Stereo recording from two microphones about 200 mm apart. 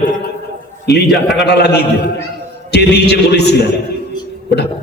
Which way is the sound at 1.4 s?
55° left (ahead or behind).